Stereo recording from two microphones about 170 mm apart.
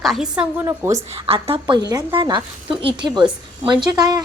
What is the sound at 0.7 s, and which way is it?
Speech, 20° right (ahead or behind).